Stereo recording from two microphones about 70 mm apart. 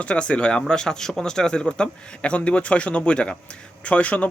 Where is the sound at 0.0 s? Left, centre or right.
Centre.